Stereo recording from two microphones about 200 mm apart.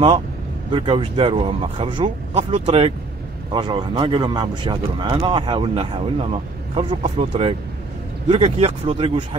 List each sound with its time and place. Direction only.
0.7 s speech: 25° right (ahead or behind)